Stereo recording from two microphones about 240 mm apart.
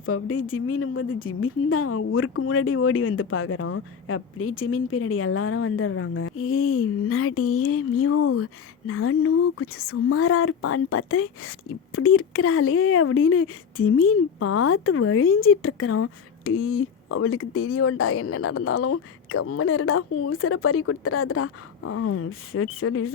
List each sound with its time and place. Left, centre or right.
0.0 s a woman's voice: left